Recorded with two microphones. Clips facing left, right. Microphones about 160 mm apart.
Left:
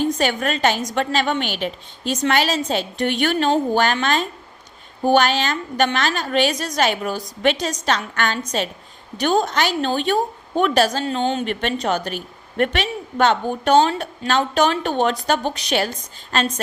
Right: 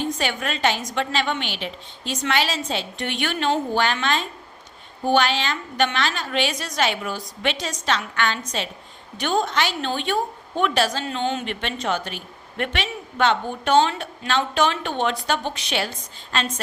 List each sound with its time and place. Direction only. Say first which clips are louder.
0.0 s a woman's voice: left 5 dB; 45° left (ahead or behind)